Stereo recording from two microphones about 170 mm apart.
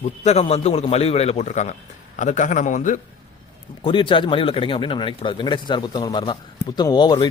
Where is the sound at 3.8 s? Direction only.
30° left (ahead or behind).